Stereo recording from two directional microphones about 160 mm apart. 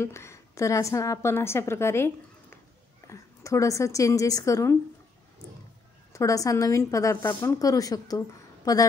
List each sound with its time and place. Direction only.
0.0 s a woman's voice: 15° left (ahead or behind)
6.1 s a woman's voice: 20° left (ahead or behind)